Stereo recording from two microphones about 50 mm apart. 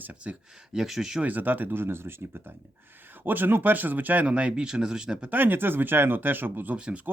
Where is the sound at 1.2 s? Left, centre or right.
Right.